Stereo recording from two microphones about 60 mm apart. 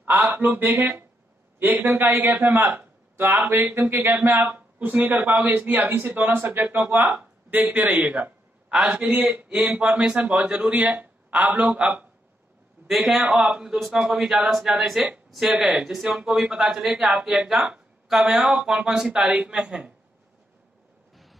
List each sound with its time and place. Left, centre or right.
0.0 s a man's voice: right
3.9 s a man's voice: right; by 8.9 s centre
9.1 s a man's voice: right
12.8 s a man's voice: centre
18.0 s speech: centre